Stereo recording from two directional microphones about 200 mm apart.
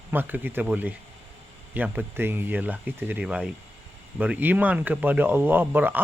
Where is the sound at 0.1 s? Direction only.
10° right (ahead or behind).